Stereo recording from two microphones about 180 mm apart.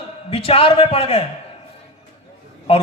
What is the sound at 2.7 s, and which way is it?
Speech, 30° left (ahead or behind).